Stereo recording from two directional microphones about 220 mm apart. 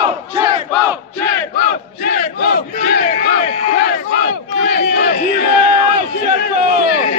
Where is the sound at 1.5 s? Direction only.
40° left (ahead or behind).